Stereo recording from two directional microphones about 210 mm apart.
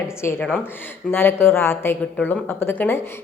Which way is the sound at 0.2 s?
10° left (ahead or behind).